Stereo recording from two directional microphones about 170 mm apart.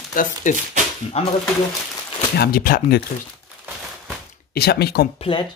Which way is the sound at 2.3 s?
65° left (ahead or behind).